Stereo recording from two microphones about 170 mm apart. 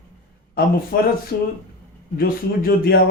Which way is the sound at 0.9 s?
70° left (ahead or behind).